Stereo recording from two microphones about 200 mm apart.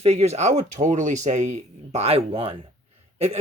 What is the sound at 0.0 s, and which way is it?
Speech, 35° right (ahead or behind).